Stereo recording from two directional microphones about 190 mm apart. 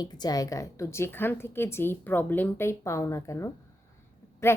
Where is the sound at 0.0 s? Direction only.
20° left (ahead or behind).